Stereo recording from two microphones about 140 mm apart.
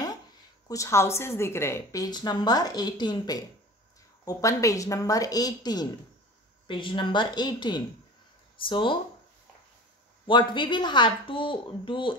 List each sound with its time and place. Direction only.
0.7 s a woman's voice: 20° left (ahead or behind)
10.2 s a woman's voice: 35° left (ahead or behind)